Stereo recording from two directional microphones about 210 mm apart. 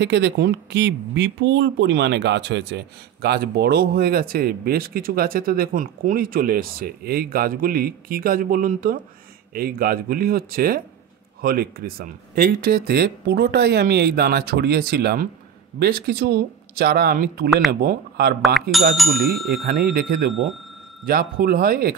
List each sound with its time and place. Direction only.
0.0 s speech: 55° right (ahead or behind)
18.4 s speech: centre (ahead or behind)
19.6 s speech: 45° right (ahead or behind)